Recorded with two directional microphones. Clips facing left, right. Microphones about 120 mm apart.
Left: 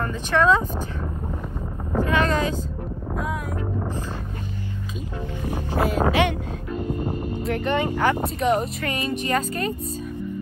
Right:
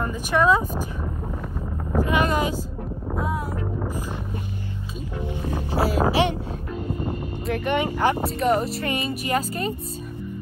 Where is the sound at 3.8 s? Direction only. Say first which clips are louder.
Even; 10° right (ahead or behind).